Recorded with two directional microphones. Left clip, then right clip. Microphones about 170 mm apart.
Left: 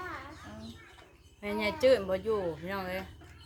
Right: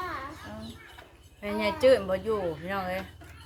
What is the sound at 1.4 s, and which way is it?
Speech, 25° left (ahead or behind).